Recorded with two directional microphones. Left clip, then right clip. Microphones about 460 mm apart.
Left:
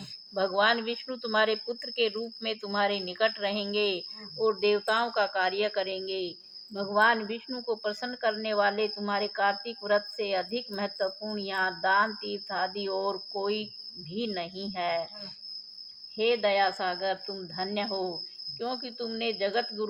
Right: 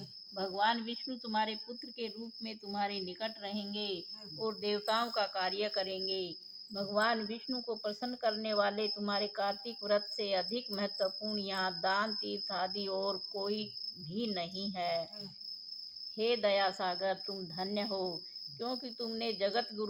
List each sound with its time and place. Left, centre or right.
0.3 s a woman's voice: right
16.1 s a woman's voice: right